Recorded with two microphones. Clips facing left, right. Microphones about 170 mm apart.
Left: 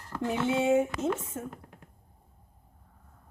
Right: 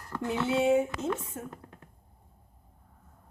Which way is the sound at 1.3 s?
40° left (ahead or behind).